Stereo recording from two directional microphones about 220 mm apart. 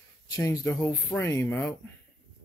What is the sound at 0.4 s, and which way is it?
Speech, 15° left (ahead or behind).